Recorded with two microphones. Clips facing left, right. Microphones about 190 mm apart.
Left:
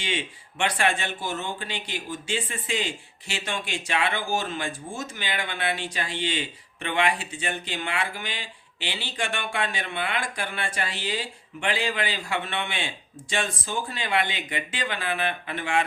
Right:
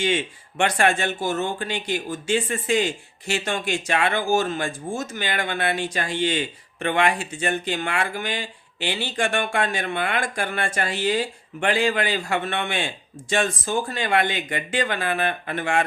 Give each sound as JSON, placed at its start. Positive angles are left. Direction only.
{"t": 0.0, "sound": "speech", "side_deg": -45}